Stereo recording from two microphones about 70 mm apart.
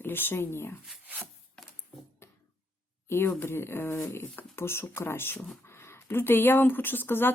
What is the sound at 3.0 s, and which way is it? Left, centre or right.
Speech, left.